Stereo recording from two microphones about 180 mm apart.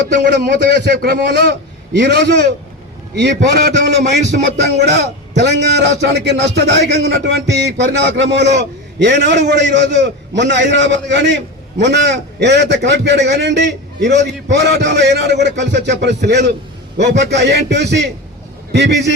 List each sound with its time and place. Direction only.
0.2 s a man's voice: 60° right (ahead or behind)